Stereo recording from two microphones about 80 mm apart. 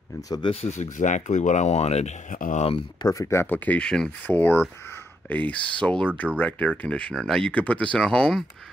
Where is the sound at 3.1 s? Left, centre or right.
Left.